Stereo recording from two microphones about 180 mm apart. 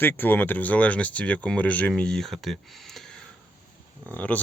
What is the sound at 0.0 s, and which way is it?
Speech, 10° left (ahead or behind).